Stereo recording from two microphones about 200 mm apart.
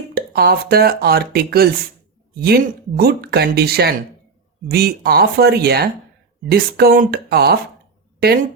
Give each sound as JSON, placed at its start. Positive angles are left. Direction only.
{"t": 0.1, "sound": "speech", "side_deg": -50}